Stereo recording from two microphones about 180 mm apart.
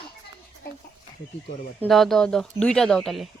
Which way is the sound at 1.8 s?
Centre (ahead or behind).